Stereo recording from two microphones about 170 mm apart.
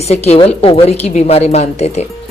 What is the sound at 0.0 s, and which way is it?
Speech, 40° left (ahead or behind).